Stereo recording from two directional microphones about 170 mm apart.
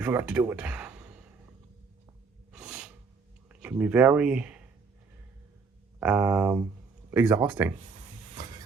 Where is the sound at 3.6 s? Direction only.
10° right (ahead or behind).